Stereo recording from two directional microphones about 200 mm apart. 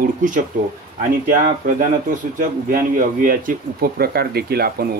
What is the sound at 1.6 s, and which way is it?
Speech, 40° right (ahead or behind).